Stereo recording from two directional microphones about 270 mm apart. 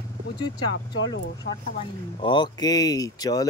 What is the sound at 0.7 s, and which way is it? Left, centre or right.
Speech, left.